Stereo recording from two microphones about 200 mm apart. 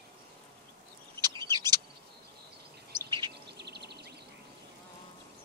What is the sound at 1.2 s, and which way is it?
Bird, 20° right (ahead or behind).